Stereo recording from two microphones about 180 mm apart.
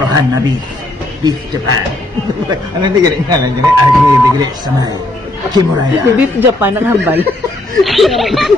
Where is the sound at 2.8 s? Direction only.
20° right (ahead or behind).